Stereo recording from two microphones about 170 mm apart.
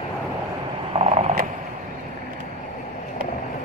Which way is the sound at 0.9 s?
40° right (ahead or behind).